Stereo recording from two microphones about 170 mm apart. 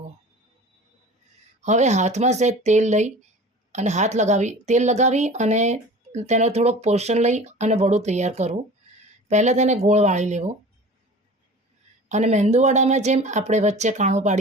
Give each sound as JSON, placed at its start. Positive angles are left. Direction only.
{"t": 1.6, "sound": "a woman's voice", "side_deg": -45}
{"t": 12.0, "sound": "a woman's voice", "side_deg": -45}